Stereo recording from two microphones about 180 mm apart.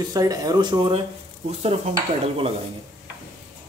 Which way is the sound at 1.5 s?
35° right (ahead or behind).